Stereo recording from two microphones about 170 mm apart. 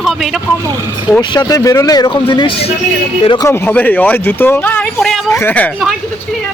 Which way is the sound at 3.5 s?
15° left (ahead or behind).